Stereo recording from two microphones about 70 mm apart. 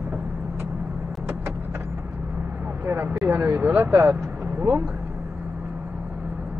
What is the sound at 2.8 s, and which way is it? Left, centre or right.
Vehicle, right.